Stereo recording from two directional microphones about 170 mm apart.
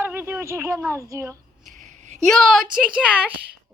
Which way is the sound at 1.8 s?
45° right (ahead or behind).